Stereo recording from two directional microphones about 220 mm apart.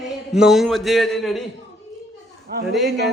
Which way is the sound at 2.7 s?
Centre (ahead or behind).